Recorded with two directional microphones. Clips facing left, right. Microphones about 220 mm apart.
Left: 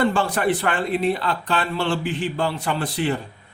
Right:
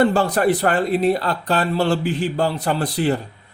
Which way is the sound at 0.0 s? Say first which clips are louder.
Right 4 dB; 40° right (ahead or behind).